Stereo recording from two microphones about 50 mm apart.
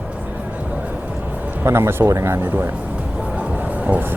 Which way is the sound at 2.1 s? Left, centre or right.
Right.